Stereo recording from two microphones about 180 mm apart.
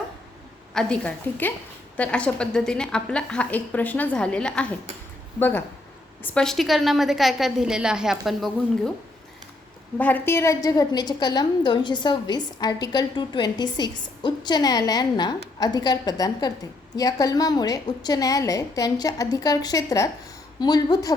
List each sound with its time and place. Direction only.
0.7 s a woman's voice: 5° left (ahead or behind)
10.0 s a woman's voice: 10° left (ahead or behind)